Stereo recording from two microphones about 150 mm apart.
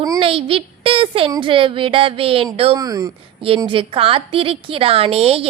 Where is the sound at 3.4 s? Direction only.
35° right (ahead or behind).